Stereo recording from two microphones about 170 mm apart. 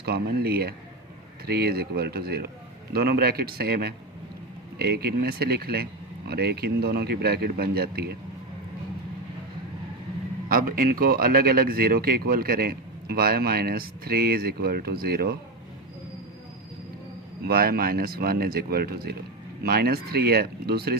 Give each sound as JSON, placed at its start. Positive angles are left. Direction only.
{"t": 0.0, "sound": "speech", "side_deg": -65}
{"t": 10.5, "sound": "speech", "side_deg": -55}
{"t": 17.4, "sound": "speech", "side_deg": -65}